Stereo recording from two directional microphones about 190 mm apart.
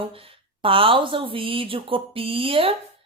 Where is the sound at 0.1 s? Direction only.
30° right (ahead or behind).